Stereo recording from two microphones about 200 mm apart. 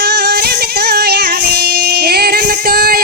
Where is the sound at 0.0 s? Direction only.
55° right (ahead or behind).